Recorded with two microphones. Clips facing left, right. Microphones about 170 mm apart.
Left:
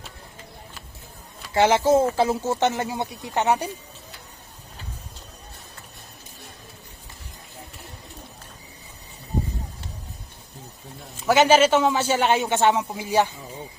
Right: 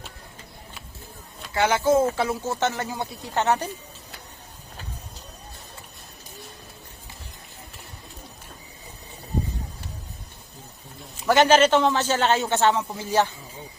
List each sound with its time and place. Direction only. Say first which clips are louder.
1.5 s speech: left 2 dB; 25° left (ahead or behind)
11.3 s a man's voice: even; 10° left (ahead or behind)